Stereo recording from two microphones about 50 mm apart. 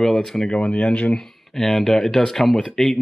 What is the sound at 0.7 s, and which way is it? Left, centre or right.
Speech, left.